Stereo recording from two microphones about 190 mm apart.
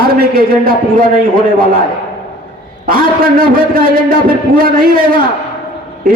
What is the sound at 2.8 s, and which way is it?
A man's voice, 50° right (ahead or behind).